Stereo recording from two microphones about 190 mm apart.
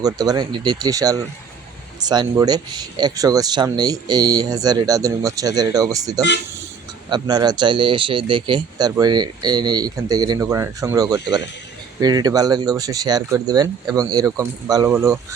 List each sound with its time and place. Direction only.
0.0 s speech: 20° right (ahead or behind)